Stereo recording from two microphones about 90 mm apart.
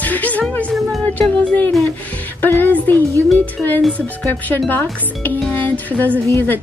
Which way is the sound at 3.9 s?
20° left (ahead or behind).